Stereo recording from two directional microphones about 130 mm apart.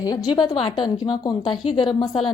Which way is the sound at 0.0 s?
30° left (ahead or behind).